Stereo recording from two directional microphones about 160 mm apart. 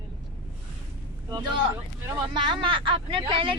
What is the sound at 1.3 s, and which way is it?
A woman's voice, 25° right (ahead or behind).